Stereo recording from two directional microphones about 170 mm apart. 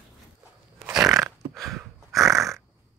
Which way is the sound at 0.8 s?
5° right (ahead or behind).